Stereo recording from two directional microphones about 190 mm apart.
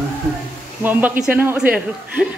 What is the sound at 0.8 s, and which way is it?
A woman's voice, 10° right (ahead or behind).